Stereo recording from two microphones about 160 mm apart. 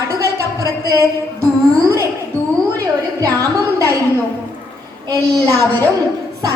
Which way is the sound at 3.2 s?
20° right (ahead or behind).